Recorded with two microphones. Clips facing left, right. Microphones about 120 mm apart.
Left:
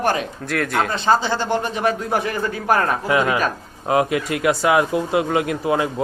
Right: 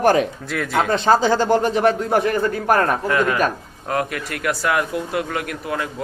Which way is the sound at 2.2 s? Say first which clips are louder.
Right 4 dB; 55° right (ahead or behind).